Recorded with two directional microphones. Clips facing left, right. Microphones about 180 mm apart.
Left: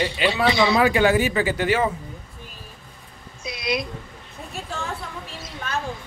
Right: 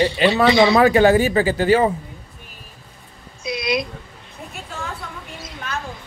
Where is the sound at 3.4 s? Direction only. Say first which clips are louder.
Right 4 dB; 90° right.